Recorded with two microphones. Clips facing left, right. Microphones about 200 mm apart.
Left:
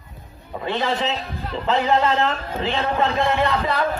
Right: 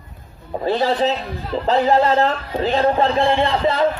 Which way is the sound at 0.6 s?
35° right (ahead or behind).